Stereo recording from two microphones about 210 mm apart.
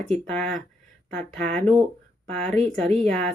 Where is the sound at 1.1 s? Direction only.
30° right (ahead or behind).